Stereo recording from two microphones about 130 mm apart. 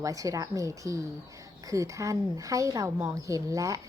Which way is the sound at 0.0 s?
25° right (ahead or behind).